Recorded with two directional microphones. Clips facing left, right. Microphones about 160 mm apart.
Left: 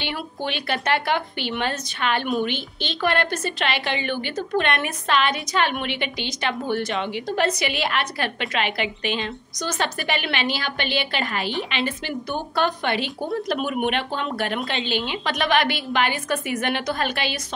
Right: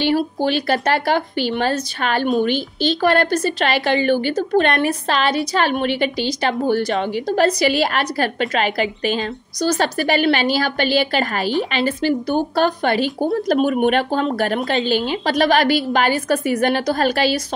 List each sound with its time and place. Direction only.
0.0 s a woman's voice: 35° right (ahead or behind)